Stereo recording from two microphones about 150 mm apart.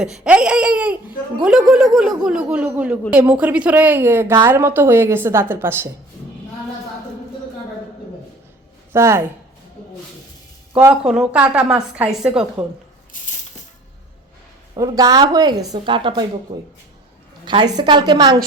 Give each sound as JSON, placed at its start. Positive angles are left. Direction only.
{"t": 0.0, "sound": "a woman's voice", "side_deg": -5}
{"t": 8.9, "sound": "speech", "side_deg": -15}
{"t": 10.8, "sound": "a woman's voice", "side_deg": -5}
{"t": 13.1, "sound": "maraca", "side_deg": 60}
{"t": 14.8, "sound": "a woman's voice", "side_deg": -25}
{"t": 16.5, "sound": "speech", "side_deg": -45}
{"t": 17.4, "sound": "a woman's voice", "side_deg": -30}